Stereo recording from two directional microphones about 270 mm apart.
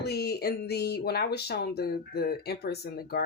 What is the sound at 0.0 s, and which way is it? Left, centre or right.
Speech, left.